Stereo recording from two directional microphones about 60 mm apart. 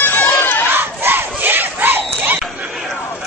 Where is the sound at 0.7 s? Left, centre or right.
Right.